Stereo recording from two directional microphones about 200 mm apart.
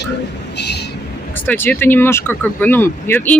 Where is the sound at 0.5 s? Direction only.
55° left (ahead or behind).